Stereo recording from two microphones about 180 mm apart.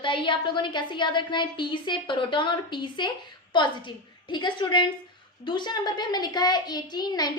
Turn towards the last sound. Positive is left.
turn(degrees=20)  # may be behind; listen again after turning